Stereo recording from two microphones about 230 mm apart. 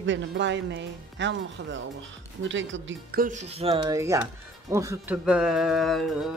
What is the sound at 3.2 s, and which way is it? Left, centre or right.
Speech, right.